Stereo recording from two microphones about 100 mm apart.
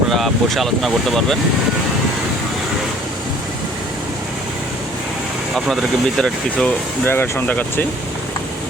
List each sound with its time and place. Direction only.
0.2 s speech: centre (ahead or behind)
5.5 s speech: centre (ahead or behind)
7.0 s speech: 20° left (ahead or behind)